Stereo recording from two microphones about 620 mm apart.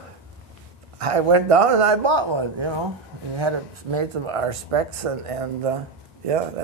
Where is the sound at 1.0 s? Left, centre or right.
Right.